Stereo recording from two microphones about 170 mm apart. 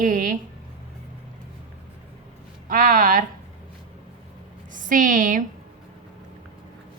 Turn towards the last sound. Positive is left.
turn(degrees=-50)  # may be behind; listen again after turning